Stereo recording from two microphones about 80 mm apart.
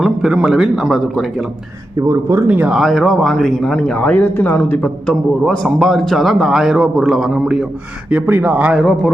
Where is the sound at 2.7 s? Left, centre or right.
Centre; by 4.9 s left.